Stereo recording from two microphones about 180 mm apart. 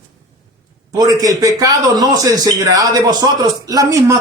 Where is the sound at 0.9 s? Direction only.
20° right (ahead or behind).